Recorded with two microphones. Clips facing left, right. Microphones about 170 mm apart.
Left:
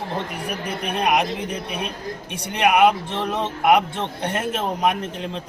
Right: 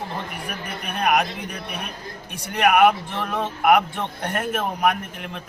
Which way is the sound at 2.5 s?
20° left (ahead or behind).